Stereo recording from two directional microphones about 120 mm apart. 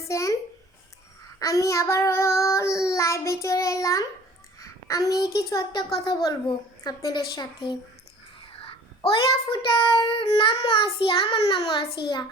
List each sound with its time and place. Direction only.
0.0 s a sound: 25° left (ahead or behind)
1.4 s child singing: 25° left (ahead or behind)
6.8 s a woman's voice: 35° left (ahead or behind)
9.0 s a child's voice: 45° left (ahead or behind)